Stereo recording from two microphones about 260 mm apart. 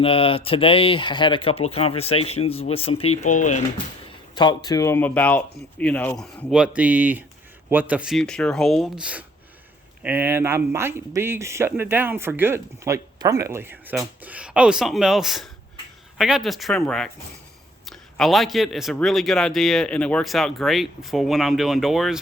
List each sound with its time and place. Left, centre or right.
0.0 s speech: left
4.4 s a man's voice: centre